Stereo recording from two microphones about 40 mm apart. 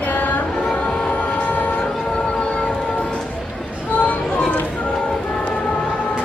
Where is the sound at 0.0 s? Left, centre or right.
Left.